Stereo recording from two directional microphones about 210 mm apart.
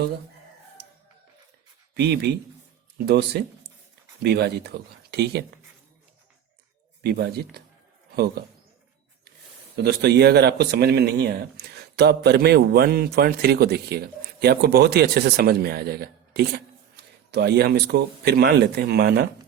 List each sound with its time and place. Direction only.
2.0 s speech: 50° right (ahead or behind)
7.0 s speech: 50° right (ahead or behind)
9.7 s speech: 50° right (ahead or behind)